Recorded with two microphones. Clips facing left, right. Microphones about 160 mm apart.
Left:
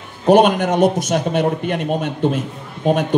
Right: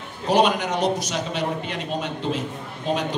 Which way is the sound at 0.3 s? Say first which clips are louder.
Left 7 dB; 50° left (ahead or behind).